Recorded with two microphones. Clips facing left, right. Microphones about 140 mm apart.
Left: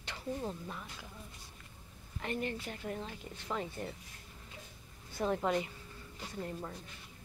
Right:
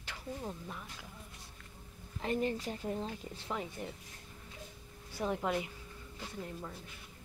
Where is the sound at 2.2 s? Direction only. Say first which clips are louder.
Right 4 dB; 35° right (ahead or behind).